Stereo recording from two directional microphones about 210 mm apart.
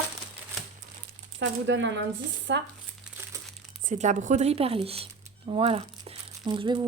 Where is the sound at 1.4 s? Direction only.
60° right (ahead or behind).